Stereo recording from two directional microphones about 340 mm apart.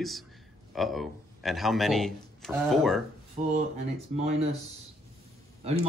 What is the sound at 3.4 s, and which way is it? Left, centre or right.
Speech, right.